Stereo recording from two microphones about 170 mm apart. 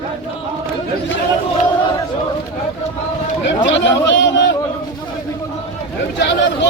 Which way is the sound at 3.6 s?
90° left.